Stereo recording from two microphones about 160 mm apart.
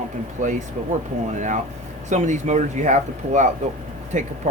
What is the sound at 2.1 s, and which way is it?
Speech, 50° right (ahead or behind).